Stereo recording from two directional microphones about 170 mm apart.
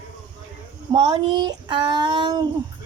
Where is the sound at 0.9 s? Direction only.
25° right (ahead or behind).